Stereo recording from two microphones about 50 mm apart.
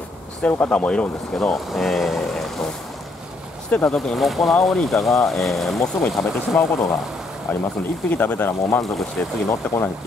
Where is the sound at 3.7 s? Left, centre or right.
Left.